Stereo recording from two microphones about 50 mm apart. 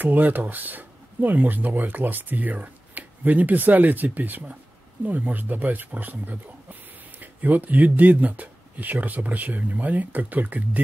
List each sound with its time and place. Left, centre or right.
0.0 s speech: right